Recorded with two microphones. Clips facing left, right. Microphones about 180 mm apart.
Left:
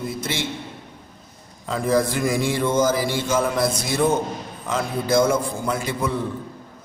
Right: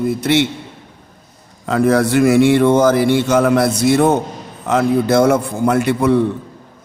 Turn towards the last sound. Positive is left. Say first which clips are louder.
# right 10 dB
turn(degrees=-65)  # may be behind; listen again after turning